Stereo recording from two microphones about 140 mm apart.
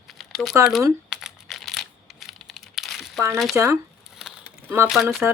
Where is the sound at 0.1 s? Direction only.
Centre (ahead or behind).